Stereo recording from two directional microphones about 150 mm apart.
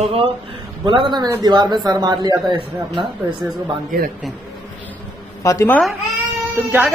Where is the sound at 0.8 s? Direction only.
35° right (ahead or behind).